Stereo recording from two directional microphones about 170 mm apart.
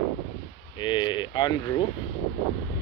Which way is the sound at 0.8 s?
25° left (ahead or behind).